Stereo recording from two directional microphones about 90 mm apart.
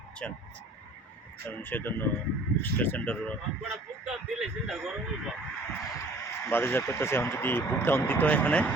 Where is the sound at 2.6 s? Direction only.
20° left (ahead or behind).